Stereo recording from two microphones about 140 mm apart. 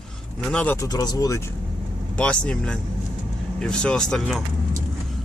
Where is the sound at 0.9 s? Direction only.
30° left (ahead or behind).